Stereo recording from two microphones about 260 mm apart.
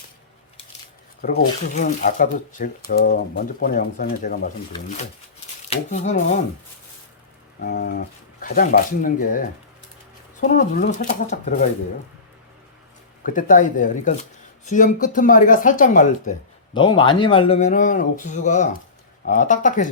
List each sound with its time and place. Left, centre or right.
1.2 s speech: left
5.6 s speech: left
7.6 s speech: left
13.2 s speech: left
16.7 s speech: centre